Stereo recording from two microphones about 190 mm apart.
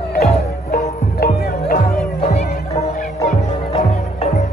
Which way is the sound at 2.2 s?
35° left (ahead or behind).